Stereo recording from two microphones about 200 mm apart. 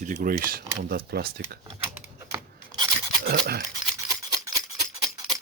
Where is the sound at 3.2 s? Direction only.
50° right (ahead or behind).